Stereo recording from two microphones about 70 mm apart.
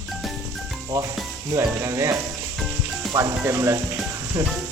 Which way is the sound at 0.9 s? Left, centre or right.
Right.